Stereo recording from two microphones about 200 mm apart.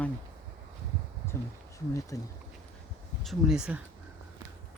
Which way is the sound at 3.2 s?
Centre (ahead or behind).